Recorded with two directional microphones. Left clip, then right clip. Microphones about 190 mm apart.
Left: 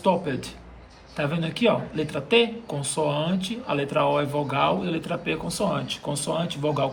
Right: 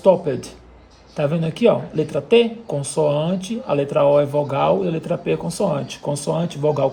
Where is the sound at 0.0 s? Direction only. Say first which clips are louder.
Right 8 dB; 40° right (ahead or behind).